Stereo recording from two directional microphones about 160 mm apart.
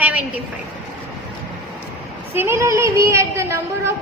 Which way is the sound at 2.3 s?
15° right (ahead or behind).